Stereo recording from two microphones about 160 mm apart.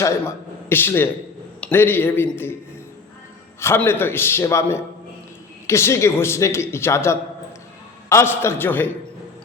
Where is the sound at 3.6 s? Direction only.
15° left (ahead or behind).